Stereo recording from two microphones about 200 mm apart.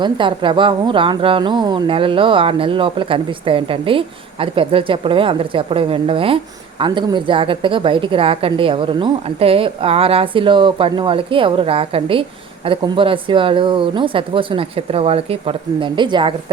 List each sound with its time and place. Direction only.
0.0 s speech: 25° right (ahead or behind)